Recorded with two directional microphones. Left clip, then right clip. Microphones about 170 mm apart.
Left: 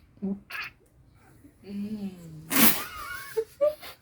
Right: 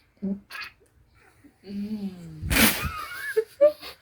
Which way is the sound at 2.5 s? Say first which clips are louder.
Right 3 dB; 5° left (ahead or behind).